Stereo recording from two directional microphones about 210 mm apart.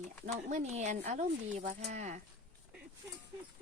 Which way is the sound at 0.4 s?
40° right (ahead or behind).